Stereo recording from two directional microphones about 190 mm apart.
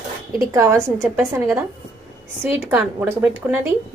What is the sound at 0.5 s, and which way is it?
Speech, 15° right (ahead or behind).